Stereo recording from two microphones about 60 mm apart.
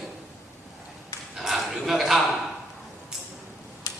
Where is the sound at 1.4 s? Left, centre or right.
Centre.